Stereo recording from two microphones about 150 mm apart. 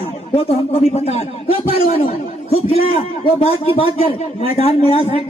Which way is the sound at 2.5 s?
40° left (ahead or behind).